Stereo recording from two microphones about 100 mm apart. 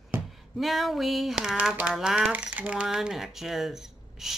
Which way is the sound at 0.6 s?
Centre (ahead or behind).